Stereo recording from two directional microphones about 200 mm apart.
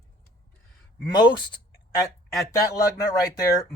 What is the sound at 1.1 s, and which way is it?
Speech, 20° left (ahead or behind).